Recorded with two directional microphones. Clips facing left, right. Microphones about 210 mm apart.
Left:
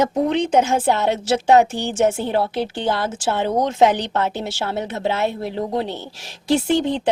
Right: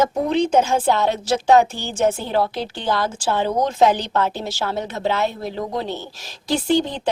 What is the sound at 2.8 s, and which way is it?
A woman's voice, 25° left (ahead or behind).